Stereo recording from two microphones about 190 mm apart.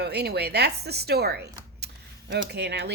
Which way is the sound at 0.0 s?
60° right (ahead or behind).